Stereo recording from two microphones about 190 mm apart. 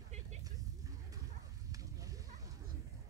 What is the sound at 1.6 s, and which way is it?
Sheep, 20° right (ahead or behind).